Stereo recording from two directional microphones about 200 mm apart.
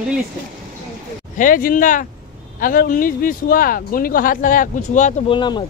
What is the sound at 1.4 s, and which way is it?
Speech, 45° left (ahead or behind).